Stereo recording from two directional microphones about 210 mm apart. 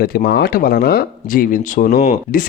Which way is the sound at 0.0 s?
45° left (ahead or behind).